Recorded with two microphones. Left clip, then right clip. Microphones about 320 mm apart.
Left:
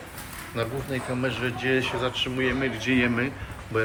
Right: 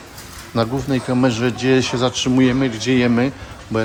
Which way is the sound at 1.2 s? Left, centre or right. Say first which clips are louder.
Right 8 dB; right.